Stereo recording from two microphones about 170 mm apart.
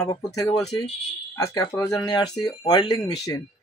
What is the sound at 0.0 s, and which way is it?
Speech, 20° left (ahead or behind).